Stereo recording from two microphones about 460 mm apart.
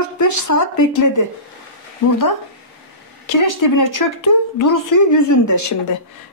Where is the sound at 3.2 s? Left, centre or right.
Left.